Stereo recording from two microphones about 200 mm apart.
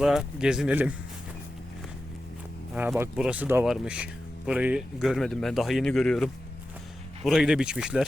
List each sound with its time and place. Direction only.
0.0 s speech: 5° right (ahead or behind)
2.7 s speech: 5° right (ahead or behind)